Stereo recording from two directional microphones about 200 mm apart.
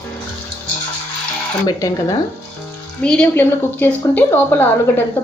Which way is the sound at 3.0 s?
5° left (ahead or behind).